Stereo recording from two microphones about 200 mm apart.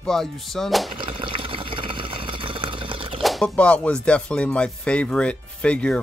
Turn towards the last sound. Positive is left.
turn(degrees=5)  # may be behind; listen again after turning